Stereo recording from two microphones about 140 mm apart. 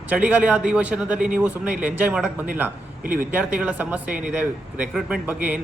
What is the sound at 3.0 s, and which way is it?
Speech, 85° right.